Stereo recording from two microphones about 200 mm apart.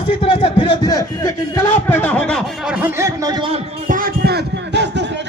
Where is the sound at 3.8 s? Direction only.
45° right (ahead or behind).